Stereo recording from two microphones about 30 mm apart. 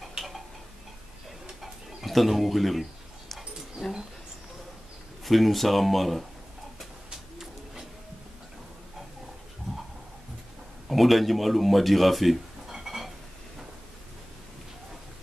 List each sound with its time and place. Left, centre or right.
2.0 s a sound: centre
5.2 s speech: centre
7.1 s bird: centre
10.9 s a man's voice: centre